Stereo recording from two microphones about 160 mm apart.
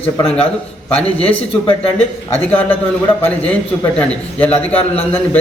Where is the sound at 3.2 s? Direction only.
10° left (ahead or behind).